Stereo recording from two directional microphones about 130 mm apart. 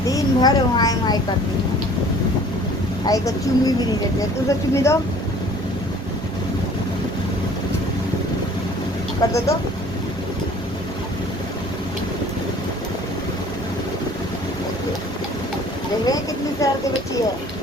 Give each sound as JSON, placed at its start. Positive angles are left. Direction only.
{"t": 0.1, "sound": "speech", "side_deg": 30}
{"t": 3.1, "sound": "speech", "side_deg": 25}
{"t": 9.2, "sound": "speech", "side_deg": 25}
{"t": 16.0, "sound": "vehicle", "side_deg": 30}